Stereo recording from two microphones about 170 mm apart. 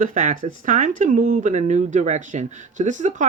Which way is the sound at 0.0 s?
50° right (ahead or behind).